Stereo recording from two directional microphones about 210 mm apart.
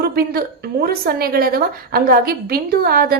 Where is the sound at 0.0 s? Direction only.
45° right (ahead or behind).